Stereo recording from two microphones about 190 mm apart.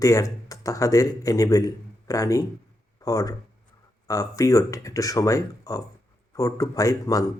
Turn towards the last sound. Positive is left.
turn(degrees=15)  # may be behind; listen again after turning